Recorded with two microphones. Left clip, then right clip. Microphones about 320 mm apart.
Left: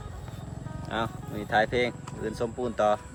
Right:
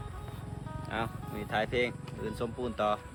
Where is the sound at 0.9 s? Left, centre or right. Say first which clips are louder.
Left 5 dB; left.